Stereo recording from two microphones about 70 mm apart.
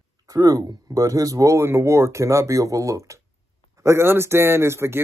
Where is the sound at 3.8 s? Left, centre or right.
Right.